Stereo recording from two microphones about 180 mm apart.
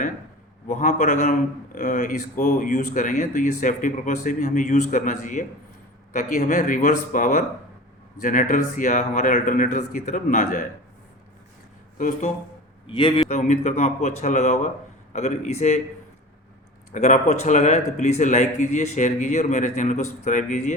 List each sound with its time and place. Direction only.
0.7 s a man's voice: 40° left (ahead or behind)
11.9 s a man's voice: 45° left (ahead or behind)
12.9 s speech: 25° left (ahead or behind)
13.3 s a man's voice: 40° left (ahead or behind)
16.9 s a man's voice: 40° left (ahead or behind)